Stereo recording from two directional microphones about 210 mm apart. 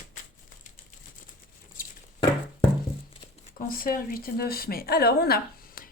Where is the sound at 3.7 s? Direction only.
40° left (ahead or behind).